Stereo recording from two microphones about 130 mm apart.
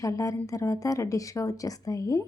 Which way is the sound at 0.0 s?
25° left (ahead or behind).